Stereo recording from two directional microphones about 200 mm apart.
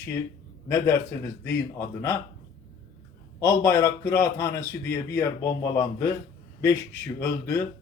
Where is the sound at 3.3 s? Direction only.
15° left (ahead or behind).